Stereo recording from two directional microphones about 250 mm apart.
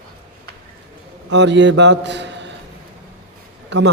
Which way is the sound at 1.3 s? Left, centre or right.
Right.